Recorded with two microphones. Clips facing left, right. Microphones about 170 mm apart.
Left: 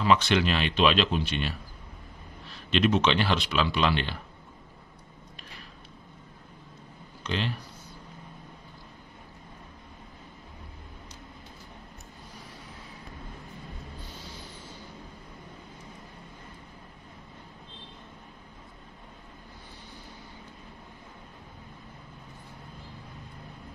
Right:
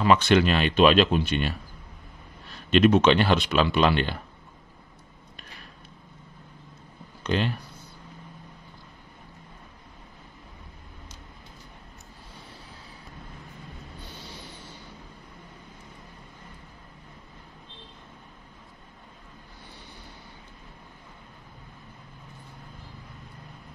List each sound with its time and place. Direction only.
0.0 s speech: 50° right (ahead or behind)
2.7 s speech: 50° right (ahead or behind)
7.2 s speech: 50° right (ahead or behind)